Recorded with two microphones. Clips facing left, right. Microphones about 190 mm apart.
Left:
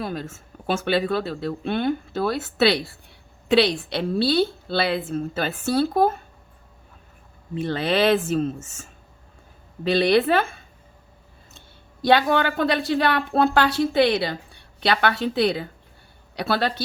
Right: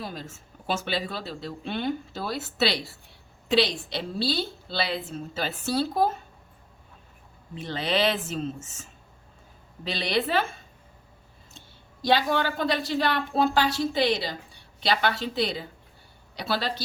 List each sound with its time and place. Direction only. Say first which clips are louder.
0.0 s a woman's voice: left 7 dB; 60° left (ahead or behind)
7.5 s a woman's voice: left 5 dB; 55° left (ahead or behind)
12.0 s a woman's voice: left 5 dB; 60° left (ahead or behind)